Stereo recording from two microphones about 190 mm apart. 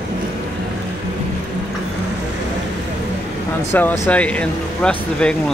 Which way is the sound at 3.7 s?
10° left (ahead or behind).